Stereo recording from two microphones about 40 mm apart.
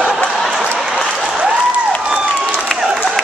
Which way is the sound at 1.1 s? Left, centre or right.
Centre.